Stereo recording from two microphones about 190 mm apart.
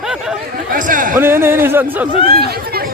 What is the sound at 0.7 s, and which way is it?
Chatter, 45° right (ahead or behind).